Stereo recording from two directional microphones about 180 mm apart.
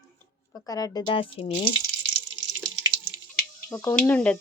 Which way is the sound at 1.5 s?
50° left (ahead or behind).